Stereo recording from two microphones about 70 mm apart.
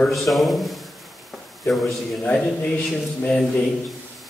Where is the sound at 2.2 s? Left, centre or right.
Left.